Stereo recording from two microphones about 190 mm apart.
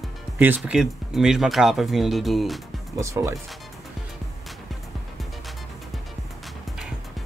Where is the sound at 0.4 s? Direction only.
5° right (ahead or behind).